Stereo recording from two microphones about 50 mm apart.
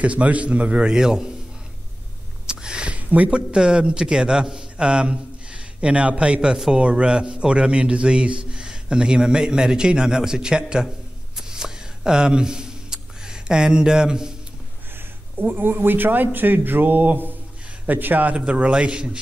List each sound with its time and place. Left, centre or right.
0.0 s a man's voice: right
2.6 s speech: centre
11.3 s a sound: centre
15.3 s a man's voice: right
18.3 s a man's voice: right